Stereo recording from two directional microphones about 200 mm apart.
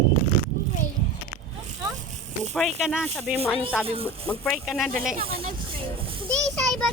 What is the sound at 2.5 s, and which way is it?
Speech, centre (ahead or behind).